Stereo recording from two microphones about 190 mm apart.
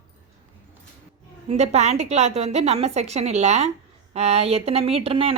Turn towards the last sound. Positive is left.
turn(degrees=-30)  # may be behind; listen again after turning